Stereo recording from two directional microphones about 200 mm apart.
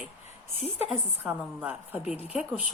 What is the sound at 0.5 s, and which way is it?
Speech, 35° left (ahead or behind).